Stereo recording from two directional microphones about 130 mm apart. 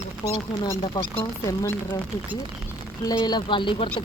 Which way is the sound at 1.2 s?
25° left (ahead or behind).